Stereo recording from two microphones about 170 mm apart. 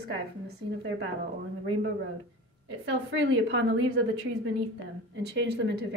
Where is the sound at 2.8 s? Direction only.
90° right.